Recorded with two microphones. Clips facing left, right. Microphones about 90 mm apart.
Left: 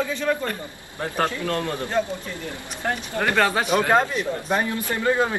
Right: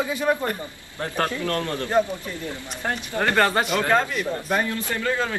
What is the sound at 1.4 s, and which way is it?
Speech, 15° left (ahead or behind).